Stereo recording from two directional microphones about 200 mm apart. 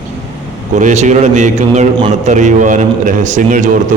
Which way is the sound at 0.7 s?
35° right (ahead or behind).